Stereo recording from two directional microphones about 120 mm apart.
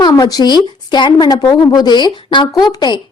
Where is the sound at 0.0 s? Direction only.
30° left (ahead or behind).